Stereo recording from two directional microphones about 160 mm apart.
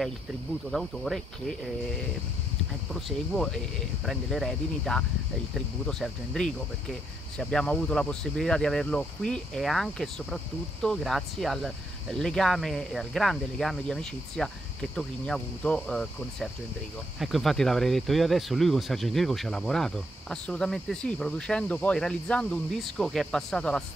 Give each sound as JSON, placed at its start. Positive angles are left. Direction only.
{"t": 0.7, "sound": "speech", "side_deg": 0}
{"t": 2.9, "sound": "speech", "side_deg": 0}